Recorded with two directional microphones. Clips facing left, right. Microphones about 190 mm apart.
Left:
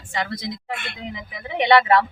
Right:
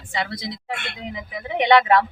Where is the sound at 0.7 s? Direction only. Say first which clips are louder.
Even; 65° right (ahead or behind).